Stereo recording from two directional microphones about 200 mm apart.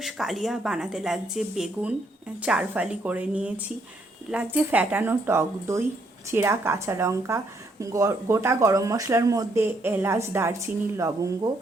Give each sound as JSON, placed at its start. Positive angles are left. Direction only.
{"t": 0.0, "sound": "speech", "side_deg": 0}